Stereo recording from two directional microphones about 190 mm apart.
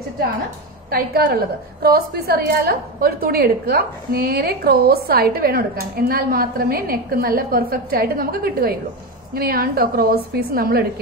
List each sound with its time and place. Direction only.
0.8 s a woman's voice: 50° right (ahead or behind)